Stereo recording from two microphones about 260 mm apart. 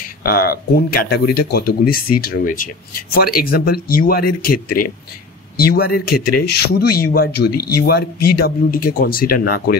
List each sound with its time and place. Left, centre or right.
0.2 s speech: left